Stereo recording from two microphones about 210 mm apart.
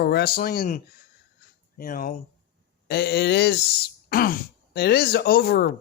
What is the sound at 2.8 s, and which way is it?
Speech, 50° left (ahead or behind).